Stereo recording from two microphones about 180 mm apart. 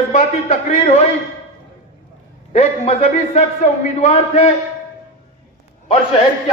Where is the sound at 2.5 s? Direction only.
35° left (ahead or behind).